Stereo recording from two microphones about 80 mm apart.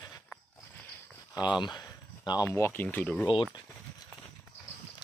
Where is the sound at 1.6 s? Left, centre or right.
Left.